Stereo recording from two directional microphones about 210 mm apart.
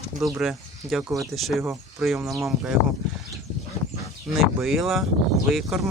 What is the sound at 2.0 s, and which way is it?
Speech, centre (ahead or behind).